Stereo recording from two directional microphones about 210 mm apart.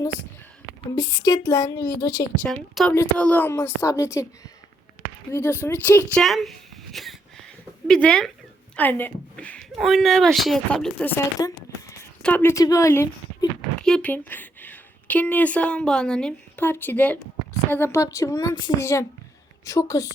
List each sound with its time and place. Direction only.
1.2 s a woman's voice: 15° left (ahead or behind)
2.4 s a woman's voice: centre (ahead or behind)
5.3 s a woman's voice: 10° left (ahead or behind)
6.2 s a sound: centre (ahead or behind)
7.9 s a woman's voice: 5° left (ahead or behind)